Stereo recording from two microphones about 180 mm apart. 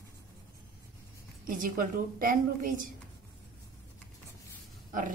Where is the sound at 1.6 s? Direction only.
50° right (ahead or behind).